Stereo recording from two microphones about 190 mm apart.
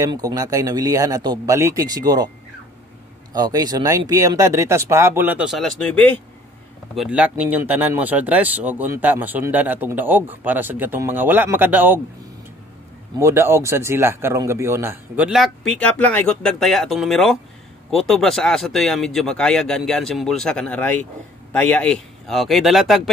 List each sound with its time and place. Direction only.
0.0 s speech: 20° right (ahead or behind)
3.3 s speech: 20° right (ahead or behind); by 6.1 s 5° left (ahead or behind)
7.0 s speech: 5° right (ahead or behind)
13.2 s speech: 15° right (ahead or behind)